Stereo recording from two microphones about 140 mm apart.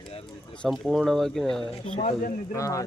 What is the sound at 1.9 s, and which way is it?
Speech, 65° left (ahead or behind).